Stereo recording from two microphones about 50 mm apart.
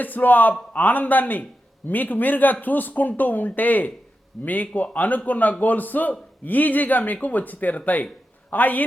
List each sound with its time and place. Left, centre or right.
0.0 s a man's voice: left